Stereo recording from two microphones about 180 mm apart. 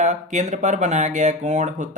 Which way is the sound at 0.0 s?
40° right (ahead or behind).